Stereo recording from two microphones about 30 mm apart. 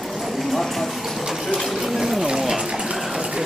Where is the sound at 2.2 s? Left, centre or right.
Centre.